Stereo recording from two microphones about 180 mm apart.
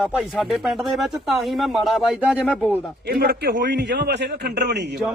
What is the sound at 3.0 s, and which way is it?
Speech, 60° right (ahead or behind).